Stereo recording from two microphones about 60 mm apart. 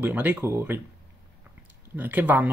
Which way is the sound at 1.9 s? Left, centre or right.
Right.